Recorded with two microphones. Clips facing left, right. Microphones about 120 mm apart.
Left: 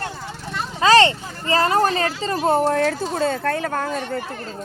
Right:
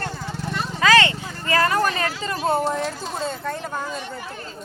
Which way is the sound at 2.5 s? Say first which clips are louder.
Left 5 dB; 65° left (ahead or behind).